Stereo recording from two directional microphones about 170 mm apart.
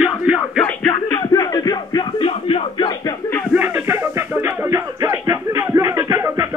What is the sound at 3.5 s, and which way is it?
Music, 10° right (ahead or behind).